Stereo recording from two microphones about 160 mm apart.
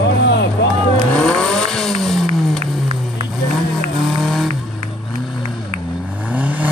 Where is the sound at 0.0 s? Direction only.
90° left.